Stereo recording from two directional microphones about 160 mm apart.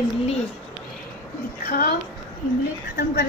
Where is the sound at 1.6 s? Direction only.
65° left (ahead or behind).